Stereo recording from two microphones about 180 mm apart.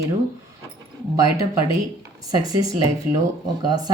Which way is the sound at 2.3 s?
20° right (ahead or behind).